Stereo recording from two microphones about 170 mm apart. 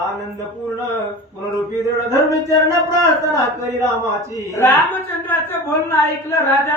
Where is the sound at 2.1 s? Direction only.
20° right (ahead or behind).